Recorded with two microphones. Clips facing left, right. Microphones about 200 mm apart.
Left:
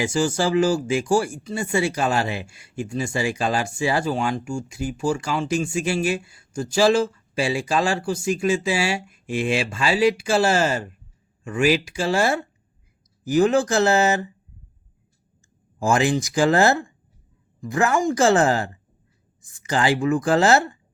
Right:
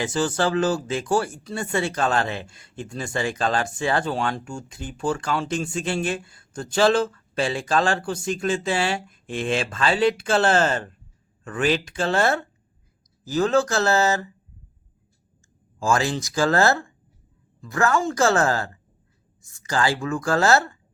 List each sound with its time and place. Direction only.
0.0 s speech: 10° left (ahead or behind)
15.8 s speech: 20° left (ahead or behind)